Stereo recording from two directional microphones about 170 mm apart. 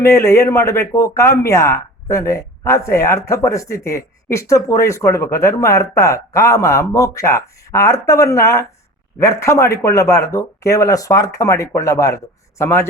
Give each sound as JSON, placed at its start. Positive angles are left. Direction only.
{"t": 0.0, "sound": "speech", "side_deg": 15}